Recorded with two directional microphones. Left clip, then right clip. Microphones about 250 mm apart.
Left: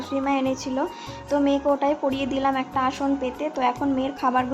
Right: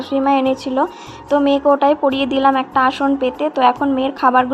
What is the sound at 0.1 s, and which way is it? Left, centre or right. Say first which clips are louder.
A woman's voice: right 9 dB; centre.